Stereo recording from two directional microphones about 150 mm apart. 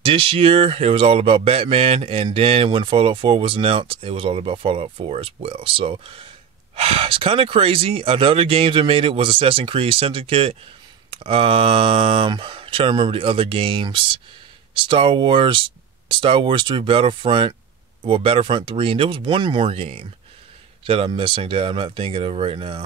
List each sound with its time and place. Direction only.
0.0 s speech: 35° right (ahead or behind)